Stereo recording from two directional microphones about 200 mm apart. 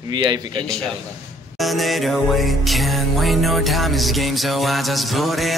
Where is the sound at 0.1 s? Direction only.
20° right (ahead or behind).